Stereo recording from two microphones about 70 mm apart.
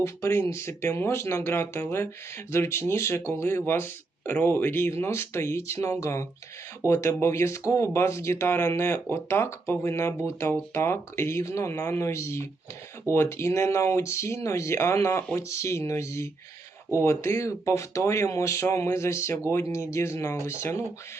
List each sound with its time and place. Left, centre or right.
0.0 s speech: left